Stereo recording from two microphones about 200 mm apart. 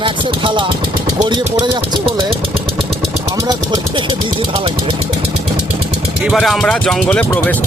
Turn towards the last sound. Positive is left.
turn(degrees=10)  # may be behind; listen again after turning